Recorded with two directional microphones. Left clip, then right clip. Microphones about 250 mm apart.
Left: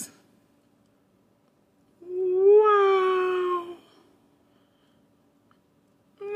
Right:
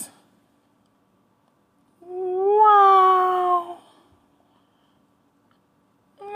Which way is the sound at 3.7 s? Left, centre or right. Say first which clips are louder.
Right 5 dB; right.